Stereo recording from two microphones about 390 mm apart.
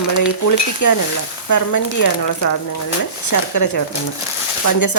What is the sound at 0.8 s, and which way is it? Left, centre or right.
A woman's voice, left.